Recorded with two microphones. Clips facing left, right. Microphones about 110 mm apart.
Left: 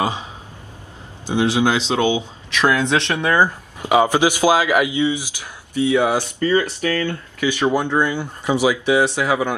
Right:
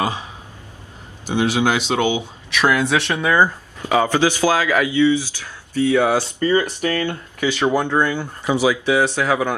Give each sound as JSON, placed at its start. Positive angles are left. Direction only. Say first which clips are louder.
{"t": 0.0, "sound": "speech", "louder": "left 1 dB", "side_deg": 20}
{"t": 1.3, "sound": "speech", "louder": "left 1 dB", "side_deg": 20}
{"t": 1.8, "sound": "speech", "louder": "left 1 dB", "side_deg": -20}
{"t": 2.1, "sound": "speech", "louder": "even", "side_deg": 20}
{"t": 2.9, "sound": "speech", "louder": "even", "side_deg": -10}
{"t": 3.3, "sound": "speech", "louder": "right 1 dB", "side_deg": 15}
{"t": 6.2, "sound": "speech", "louder": "even", "side_deg": -20}
{"t": 7.7, "sound": "speech", "louder": "even", "side_deg": 15}